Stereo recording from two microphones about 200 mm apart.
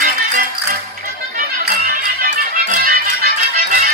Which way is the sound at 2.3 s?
40° right (ahead or behind).